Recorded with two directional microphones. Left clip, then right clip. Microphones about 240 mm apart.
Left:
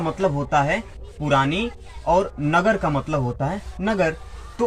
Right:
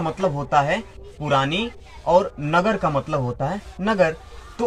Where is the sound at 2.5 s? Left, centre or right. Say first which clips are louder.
Left 1 dB; right.